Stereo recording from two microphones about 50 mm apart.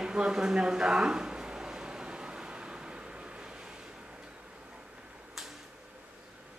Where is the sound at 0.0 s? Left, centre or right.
Centre.